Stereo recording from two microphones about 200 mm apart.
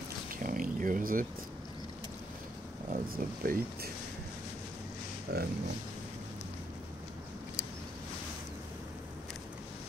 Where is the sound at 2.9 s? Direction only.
45° right (ahead or behind).